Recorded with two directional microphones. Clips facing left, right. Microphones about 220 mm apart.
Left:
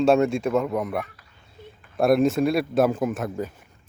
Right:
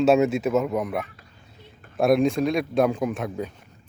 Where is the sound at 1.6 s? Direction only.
50° left (ahead or behind).